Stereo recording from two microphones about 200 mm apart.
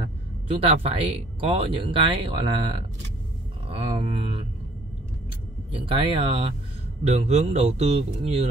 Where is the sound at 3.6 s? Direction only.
25° right (ahead or behind).